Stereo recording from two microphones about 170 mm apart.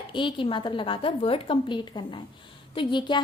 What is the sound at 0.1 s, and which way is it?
A woman's voice, 30° left (ahead or behind).